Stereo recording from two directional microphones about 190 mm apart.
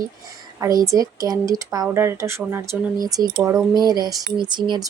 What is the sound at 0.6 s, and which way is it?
Speech, 20° right (ahead or behind).